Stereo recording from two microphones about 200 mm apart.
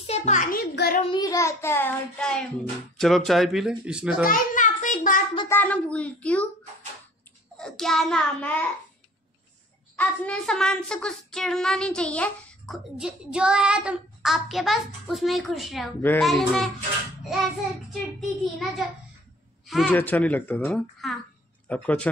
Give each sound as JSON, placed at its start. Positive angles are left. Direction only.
{"t": 0.0, "sound": "a sound", "side_deg": 30}
{"t": 1.1, "sound": "child singing", "side_deg": 15}
{"t": 3.0, "sound": "speech", "side_deg": 0}
{"t": 4.3, "sound": "child singing", "side_deg": 40}
{"t": 5.5, "sound": "child singing", "side_deg": 10}
{"t": 7.5, "sound": "speech", "side_deg": 5}
{"t": 9.9, "sound": "speech", "side_deg": 5}
{"t": 16.0, "sound": "child singing", "side_deg": 10}
{"t": 16.3, "sound": "speech", "side_deg": 0}
{"t": 17.2, "sound": "child singing", "side_deg": 0}
{"t": 18.4, "sound": "a woman's voice", "side_deg": 0}
{"t": 20.0, "sound": "child singing", "side_deg": 10}
{"t": 21.0, "sound": "a child's voice", "side_deg": 0}
{"t": 21.6, "sound": "child singing", "side_deg": 5}